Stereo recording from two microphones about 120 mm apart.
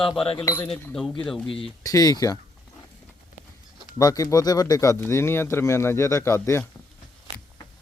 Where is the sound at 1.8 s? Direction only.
30° left (ahead or behind).